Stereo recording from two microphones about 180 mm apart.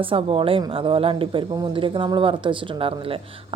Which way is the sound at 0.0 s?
30° right (ahead or behind).